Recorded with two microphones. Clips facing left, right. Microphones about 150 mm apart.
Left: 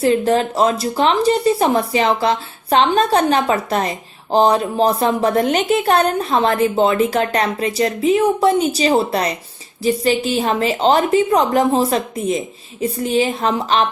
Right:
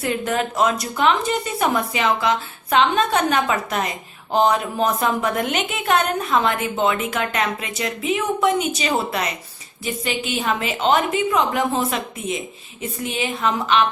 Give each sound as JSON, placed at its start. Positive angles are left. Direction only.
{"t": 0.0, "sound": "speech", "side_deg": 30}